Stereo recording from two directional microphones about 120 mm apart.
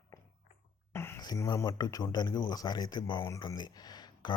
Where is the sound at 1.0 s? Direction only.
20° left (ahead or behind).